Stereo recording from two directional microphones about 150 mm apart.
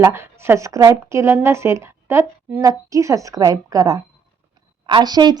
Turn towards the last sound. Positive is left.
turn(degrees=-25)  # may be behind; listen again after turning